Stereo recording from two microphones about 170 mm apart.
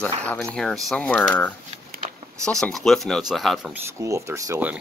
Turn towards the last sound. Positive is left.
turn(degrees=-15)  # may be behind; listen again after turning